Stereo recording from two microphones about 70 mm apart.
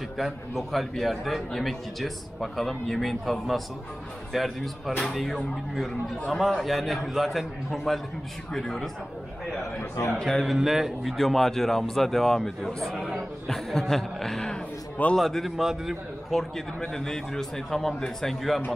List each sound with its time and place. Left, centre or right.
0.2 s a man's voice: centre
9.8 s a man's voice: left
10.1 s speech: centre
10.4 s a man's voice: centre